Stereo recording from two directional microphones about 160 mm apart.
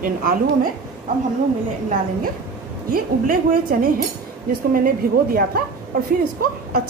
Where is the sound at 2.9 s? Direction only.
65° right (ahead or behind).